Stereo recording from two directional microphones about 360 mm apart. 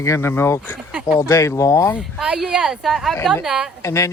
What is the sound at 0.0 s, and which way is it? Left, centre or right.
Speech, centre.